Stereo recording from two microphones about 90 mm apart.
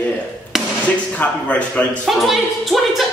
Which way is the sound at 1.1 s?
15° left (ahead or behind).